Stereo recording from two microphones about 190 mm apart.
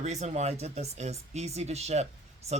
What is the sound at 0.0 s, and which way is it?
Speech, 35° right (ahead or behind).